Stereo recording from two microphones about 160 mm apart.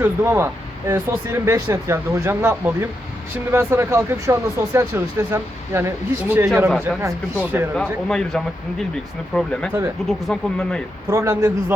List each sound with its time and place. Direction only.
0.0 s speech: 15° right (ahead or behind)
7.8 s speech: 5° left (ahead or behind)
11.1 s a man's voice: 20° right (ahead or behind)